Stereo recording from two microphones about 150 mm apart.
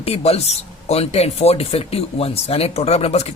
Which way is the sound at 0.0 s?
40° left (ahead or behind).